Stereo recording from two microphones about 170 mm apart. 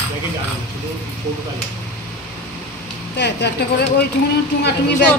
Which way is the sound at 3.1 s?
80° left.